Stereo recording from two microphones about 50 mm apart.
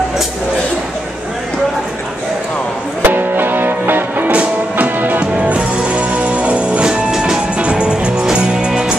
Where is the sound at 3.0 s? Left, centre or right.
Right.